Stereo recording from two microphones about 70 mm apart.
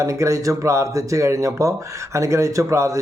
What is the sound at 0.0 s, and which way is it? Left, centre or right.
Speech, right.